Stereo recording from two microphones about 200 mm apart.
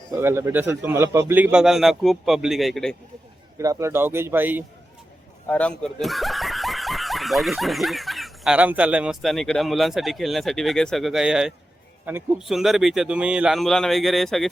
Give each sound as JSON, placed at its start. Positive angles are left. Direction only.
{"t": 0.1, "sound": "a man's voice", "side_deg": -15}
{"t": 3.6, "sound": "a man's voice", "side_deg": -15}
{"t": 5.5, "sound": "a man's voice", "side_deg": 5}